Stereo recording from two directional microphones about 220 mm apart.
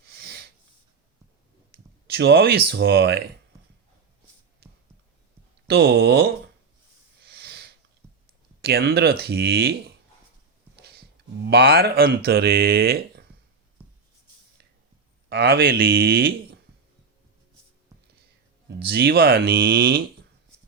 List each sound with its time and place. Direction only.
0.1 s snort: 45° right (ahead or behind)
1.7 s speech: 45° right (ahead or behind)
5.6 s speech: 45° right (ahead or behind)
7.3 s sniff: 45° right (ahead or behind)
8.6 s speech: 45° right (ahead or behind)
11.4 s speech: 45° right (ahead or behind)
13.8 s writing: 5° right (ahead or behind)
15.3 s speech: 45° right (ahead or behind)
18.9 s speech: 45° right (ahead or behind)